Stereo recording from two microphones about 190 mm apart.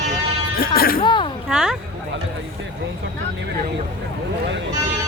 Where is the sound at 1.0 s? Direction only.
25° left (ahead or behind).